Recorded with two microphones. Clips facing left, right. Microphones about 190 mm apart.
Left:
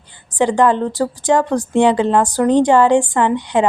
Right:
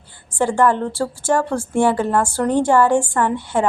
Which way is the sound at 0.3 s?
20° left (ahead or behind).